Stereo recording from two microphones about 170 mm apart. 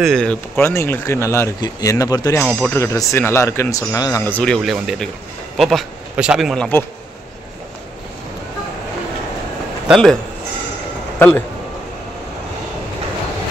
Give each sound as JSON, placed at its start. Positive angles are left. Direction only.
{"t": 0.0, "sound": "speech", "side_deg": 5}
{"t": 2.4, "sound": "speech", "side_deg": 5}
{"t": 2.8, "sound": "speech", "side_deg": 15}
{"t": 11.1, "sound": "speech", "side_deg": 10}